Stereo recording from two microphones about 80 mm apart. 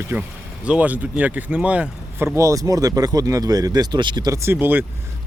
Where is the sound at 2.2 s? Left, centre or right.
Right.